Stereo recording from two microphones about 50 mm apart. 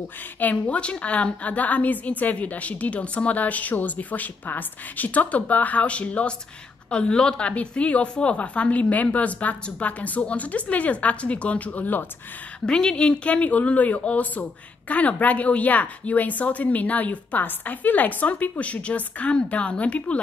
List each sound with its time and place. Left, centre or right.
0.4 s a woman's voice: left
0.7 s a woman's voice: left
12.6 s a woman's voice: centre